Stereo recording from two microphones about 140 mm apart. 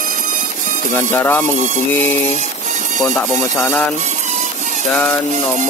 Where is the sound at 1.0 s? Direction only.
15° left (ahead or behind).